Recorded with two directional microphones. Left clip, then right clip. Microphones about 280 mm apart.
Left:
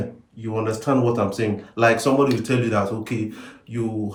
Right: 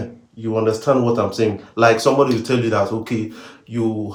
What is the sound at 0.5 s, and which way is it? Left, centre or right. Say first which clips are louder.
Speech: right 5 dB; centre.